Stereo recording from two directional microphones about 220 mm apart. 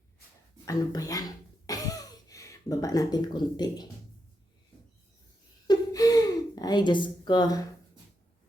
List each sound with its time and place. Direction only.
0.6 s speech: 15° left (ahead or behind)
1.6 s a sound: 15° left (ahead or behind)
5.6 s gasp: 15° left (ahead or behind)